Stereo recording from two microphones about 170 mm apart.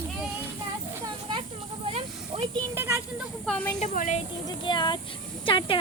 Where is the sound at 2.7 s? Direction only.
15° right (ahead or behind).